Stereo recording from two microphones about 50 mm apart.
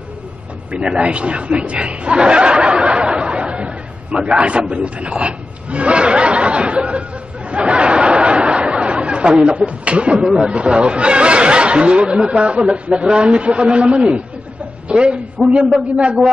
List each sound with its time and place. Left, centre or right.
0.7 s a man's voice: right
7.5 s a sound: right
10.1 s a woman's voice: centre